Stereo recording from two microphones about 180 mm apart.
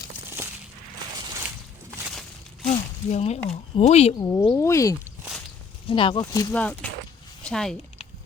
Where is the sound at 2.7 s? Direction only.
40° left (ahead or behind).